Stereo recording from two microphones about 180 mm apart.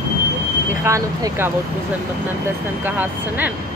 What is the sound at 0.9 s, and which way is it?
Speech, 15° right (ahead or behind).